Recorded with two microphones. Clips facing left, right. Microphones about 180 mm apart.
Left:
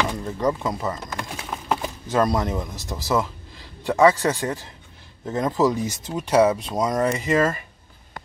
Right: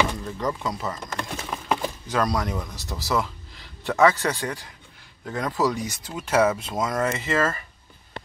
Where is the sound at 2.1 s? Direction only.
25° left (ahead or behind).